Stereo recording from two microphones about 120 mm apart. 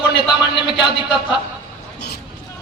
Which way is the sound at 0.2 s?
40° left (ahead or behind).